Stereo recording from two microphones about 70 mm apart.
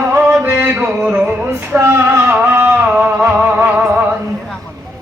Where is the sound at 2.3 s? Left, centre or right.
Right.